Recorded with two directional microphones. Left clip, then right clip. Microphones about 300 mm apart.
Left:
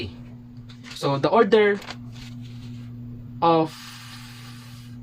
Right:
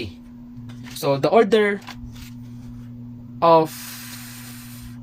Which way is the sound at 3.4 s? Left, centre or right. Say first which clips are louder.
Right 5 dB; right.